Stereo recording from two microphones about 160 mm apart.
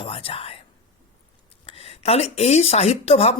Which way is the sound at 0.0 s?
35° left (ahead or behind).